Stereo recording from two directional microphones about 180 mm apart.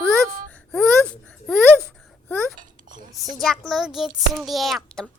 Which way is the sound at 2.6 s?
45° right (ahead or behind).